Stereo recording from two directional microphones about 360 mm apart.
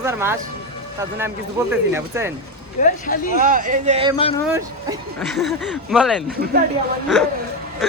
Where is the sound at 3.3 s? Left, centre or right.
Right.